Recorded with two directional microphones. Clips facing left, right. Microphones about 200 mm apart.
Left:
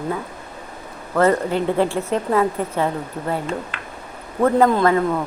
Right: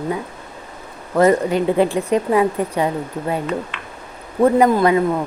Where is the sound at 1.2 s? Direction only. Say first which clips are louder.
Right 3 dB; 15° right (ahead or behind).